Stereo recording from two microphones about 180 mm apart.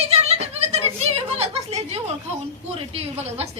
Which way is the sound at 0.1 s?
35° right (ahead or behind).